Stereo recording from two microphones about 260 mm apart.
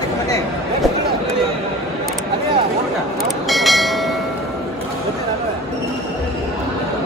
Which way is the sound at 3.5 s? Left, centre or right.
Centre.